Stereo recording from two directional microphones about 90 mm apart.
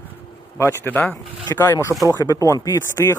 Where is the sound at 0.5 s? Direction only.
30° left (ahead or behind).